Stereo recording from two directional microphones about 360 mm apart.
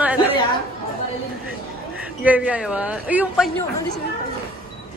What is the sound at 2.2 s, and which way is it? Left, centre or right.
A man's voice, centre.